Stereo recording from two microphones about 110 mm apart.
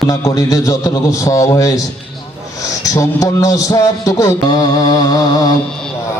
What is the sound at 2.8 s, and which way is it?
A man's voice, 30° left (ahead or behind).